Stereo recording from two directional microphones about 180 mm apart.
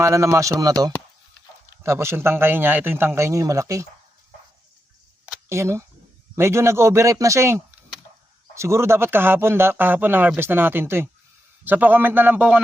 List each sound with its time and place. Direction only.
0.0 s speech: 15° right (ahead or behind)
5.5 s speech: 15° right (ahead or behind)